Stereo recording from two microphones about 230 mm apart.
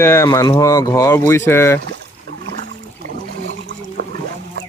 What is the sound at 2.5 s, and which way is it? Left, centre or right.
Boat, right.